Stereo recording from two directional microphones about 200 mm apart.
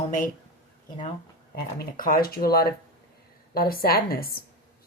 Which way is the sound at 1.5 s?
45° left (ahead or behind).